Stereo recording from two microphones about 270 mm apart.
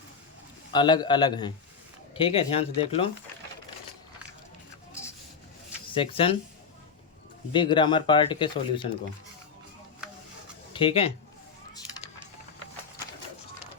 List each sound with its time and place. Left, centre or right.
0.7 s speech: centre
5.9 s speech: centre
7.5 s speech: centre
10.7 s speech: centre